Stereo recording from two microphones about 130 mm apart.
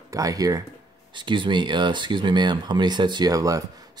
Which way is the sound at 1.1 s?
40° right (ahead or behind).